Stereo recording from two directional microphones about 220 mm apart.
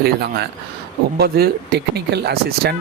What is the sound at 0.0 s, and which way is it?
Speech, 45° right (ahead or behind).